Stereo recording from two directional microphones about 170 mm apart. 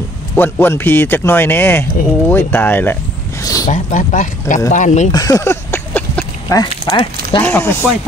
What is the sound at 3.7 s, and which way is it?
Speech, 45° left (ahead or behind).